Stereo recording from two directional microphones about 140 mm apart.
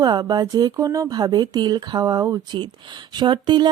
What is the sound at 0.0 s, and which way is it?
Speech, 30° right (ahead or behind).